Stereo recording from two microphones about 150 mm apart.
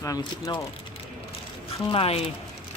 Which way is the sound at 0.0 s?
25° left (ahead or behind).